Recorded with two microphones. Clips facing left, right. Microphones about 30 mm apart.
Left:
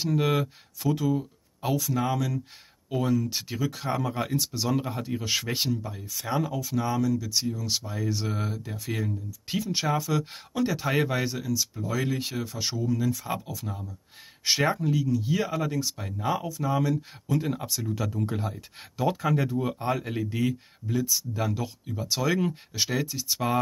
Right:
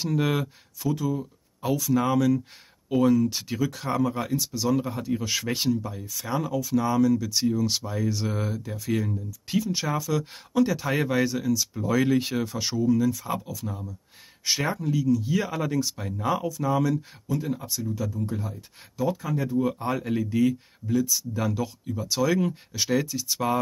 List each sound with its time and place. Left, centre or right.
0.0 s speech: centre
0.9 s speech: left
2.0 s speech: centre
9.5 s speech: left; by 12.5 s centre
12.5 s speech: centre
13.3 s speech: centre
15.5 s speech: centre
17.6 s speech: left
18.3 s speech: left
19.6 s speech: centre